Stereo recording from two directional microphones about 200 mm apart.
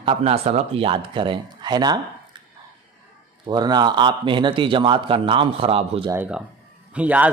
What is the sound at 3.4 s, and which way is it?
A man's voice, 20° right (ahead or behind).